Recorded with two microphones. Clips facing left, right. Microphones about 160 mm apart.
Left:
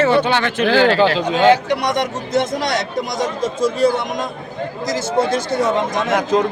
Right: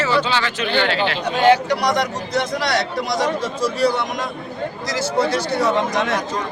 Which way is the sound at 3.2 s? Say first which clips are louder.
Left 4 dB; 50° left (ahead or behind).